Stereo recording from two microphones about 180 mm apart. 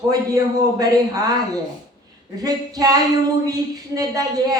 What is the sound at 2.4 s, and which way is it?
Speech, 20° right (ahead or behind).